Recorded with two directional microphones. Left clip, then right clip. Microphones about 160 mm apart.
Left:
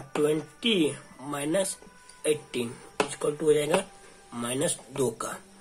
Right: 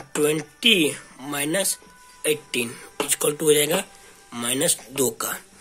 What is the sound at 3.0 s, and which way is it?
Speech, 25° right (ahead or behind).